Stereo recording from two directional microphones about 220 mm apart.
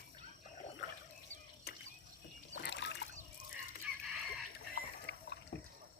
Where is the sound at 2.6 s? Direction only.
50° left (ahead or behind).